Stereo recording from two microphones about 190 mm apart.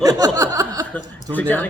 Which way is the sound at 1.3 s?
10° left (ahead or behind).